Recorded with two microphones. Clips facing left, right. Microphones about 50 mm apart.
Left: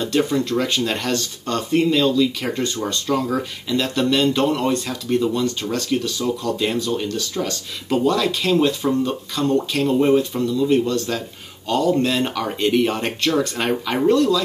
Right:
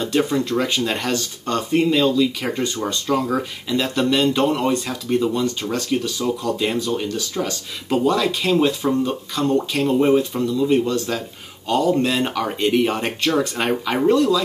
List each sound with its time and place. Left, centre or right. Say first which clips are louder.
0.0 s speech: even; centre